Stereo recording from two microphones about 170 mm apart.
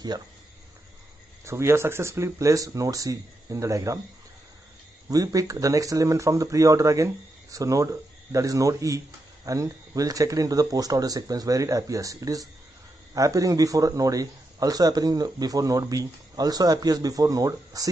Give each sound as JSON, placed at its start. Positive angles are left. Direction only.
{"t": 1.4, "sound": "speech", "side_deg": -15}
{"t": 5.1, "sound": "speech", "side_deg": -20}